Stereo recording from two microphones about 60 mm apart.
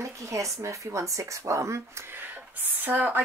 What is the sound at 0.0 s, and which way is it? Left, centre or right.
A woman's voice, right.